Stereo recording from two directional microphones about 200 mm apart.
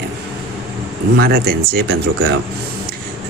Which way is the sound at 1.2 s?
50° right (ahead or behind).